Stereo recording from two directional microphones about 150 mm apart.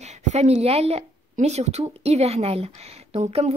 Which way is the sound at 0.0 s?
50° right (ahead or behind).